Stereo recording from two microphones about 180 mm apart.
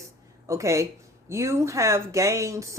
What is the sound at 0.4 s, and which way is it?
Speech, 15° right (ahead or behind).